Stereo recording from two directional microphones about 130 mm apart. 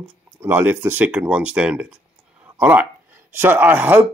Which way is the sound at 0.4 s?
15° right (ahead or behind).